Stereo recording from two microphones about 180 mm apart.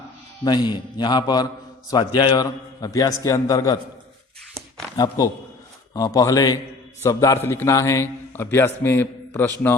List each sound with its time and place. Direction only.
0.4 s a man's voice: 25° left (ahead or behind)
4.9 s a man's voice: 20° left (ahead or behind)